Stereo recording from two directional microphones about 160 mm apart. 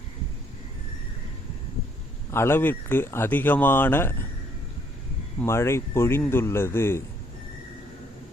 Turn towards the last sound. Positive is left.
turn(degrees=15)  # may be behind; listen again after turning